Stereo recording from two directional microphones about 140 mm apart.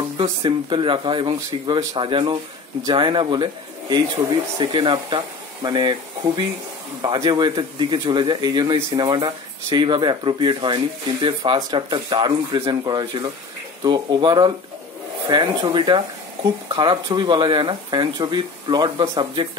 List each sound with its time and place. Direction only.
0.2 s speech: 35° right (ahead or behind)
4.6 s speech: 35° right (ahead or behind)